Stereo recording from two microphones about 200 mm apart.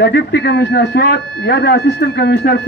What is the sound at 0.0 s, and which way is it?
A man's voice, 55° left (ahead or behind).